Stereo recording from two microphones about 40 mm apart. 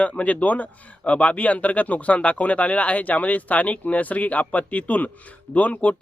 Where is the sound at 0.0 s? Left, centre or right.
Left.